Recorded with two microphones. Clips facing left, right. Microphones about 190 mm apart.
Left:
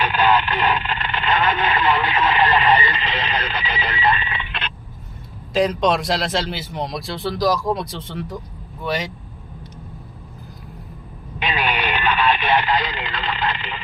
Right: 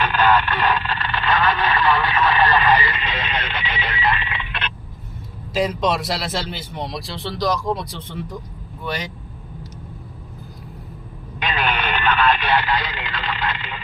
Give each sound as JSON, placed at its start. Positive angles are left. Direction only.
{"t": 0.0, "sound": "radio", "side_deg": 15}
{"t": 5.5, "sound": "speech", "side_deg": -5}
{"t": 11.4, "sound": "radio", "side_deg": 15}